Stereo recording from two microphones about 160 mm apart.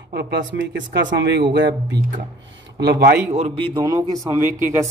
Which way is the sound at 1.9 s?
55° right (ahead or behind).